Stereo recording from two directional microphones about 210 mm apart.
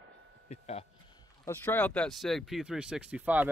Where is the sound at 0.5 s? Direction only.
30° left (ahead or behind).